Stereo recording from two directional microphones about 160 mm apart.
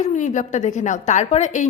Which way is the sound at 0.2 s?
50° left (ahead or behind).